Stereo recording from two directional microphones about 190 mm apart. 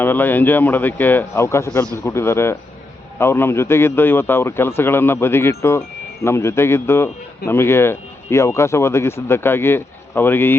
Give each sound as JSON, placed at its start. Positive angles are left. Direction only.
{"t": 0.0, "sound": "speech", "side_deg": 10}